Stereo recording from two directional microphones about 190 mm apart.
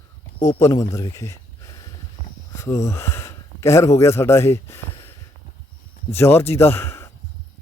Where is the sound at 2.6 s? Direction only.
15° left (ahead or behind).